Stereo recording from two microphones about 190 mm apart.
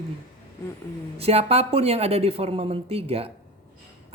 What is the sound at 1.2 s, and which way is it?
A man's voice, 30° right (ahead or behind).